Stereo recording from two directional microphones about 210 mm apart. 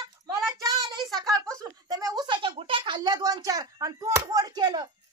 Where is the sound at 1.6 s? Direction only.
15° right (ahead or behind).